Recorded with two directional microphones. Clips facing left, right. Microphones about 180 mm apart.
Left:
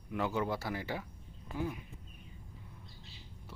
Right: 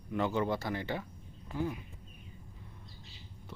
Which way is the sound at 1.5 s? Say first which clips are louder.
Right 2 dB; 10° left (ahead or behind).